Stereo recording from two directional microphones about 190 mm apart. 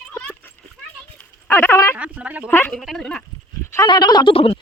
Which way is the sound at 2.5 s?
10° left (ahead or behind).